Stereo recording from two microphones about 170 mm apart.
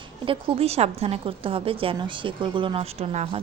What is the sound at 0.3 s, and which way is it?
A woman's voice, 35° right (ahead or behind).